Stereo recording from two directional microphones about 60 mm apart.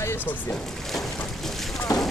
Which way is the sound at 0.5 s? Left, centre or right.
Centre.